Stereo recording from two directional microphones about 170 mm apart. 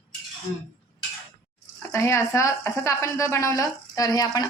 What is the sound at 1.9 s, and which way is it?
A woman's voice, 15° left (ahead or behind).